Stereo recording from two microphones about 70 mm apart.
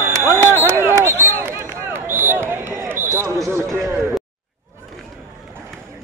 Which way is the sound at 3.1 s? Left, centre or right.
Right.